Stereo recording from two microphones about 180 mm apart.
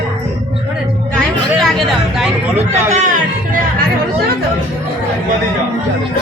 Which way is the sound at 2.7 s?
40° right (ahead or behind).